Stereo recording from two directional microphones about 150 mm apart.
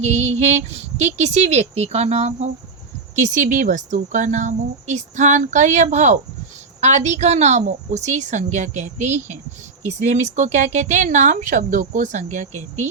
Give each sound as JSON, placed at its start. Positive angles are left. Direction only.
{"t": 0.0, "sound": "speech", "side_deg": -50}